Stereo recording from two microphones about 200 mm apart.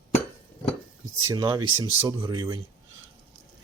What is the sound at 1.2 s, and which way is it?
Speech, 20° right (ahead or behind).